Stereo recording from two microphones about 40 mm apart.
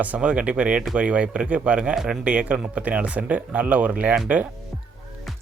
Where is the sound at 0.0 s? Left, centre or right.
Right.